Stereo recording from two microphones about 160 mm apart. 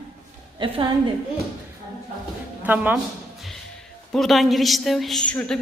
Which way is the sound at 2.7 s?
10° right (ahead or behind).